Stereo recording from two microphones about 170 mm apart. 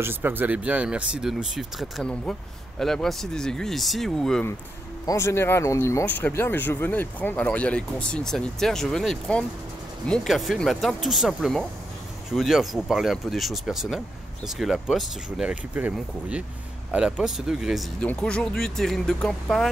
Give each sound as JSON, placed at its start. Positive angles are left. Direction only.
{"t": 0.0, "sound": "speech", "side_deg": -10}
{"t": 5.0, "sound": "speech", "side_deg": 15}